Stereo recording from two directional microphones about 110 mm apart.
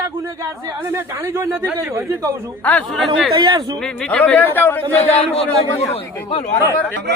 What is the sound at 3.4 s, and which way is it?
Speech, 45° right (ahead or behind).